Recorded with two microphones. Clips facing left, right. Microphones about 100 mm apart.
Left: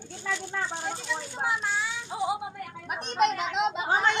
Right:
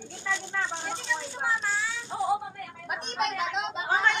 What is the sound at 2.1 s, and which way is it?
Speech, 5° left (ahead or behind).